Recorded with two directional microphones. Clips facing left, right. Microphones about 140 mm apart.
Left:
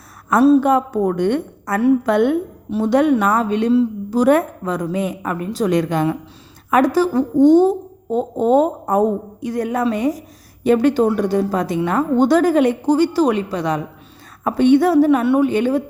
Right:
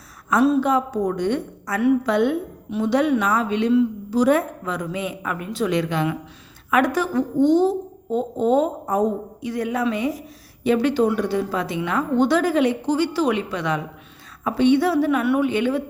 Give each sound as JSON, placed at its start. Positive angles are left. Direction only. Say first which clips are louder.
{"t": 0.3, "sound": "a woman's voice", "louder": "left 5 dB", "side_deg": 45}
{"t": 0.7, "sound": "a woman's voice", "louder": "left 4 dB", "side_deg": 55}
{"t": 2.6, "sound": "a woman's voice", "louder": "left 4 dB", "side_deg": 40}
{"t": 4.1, "sound": "a woman's voice", "louder": "left 4 dB", "side_deg": 55}
{"t": 14.4, "sound": "a woman's voice", "louder": "left 4 dB", "side_deg": 50}